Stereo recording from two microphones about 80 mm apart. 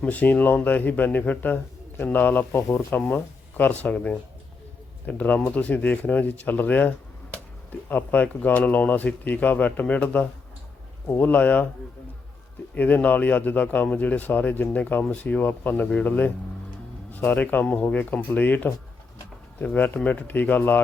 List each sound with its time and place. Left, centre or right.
0.0 s speech: centre
3.6 s speech: centre
12.7 s speech: left